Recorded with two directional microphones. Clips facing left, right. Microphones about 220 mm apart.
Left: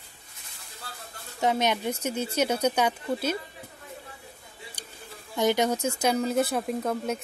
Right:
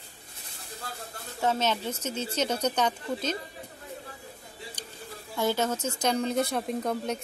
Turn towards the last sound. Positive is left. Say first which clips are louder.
# left 1 dB
turn(degrees=5)  # may be behind; listen again after turning